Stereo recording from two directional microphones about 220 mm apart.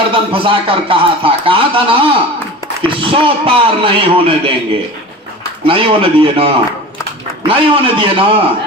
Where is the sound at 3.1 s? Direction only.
25° right (ahead or behind).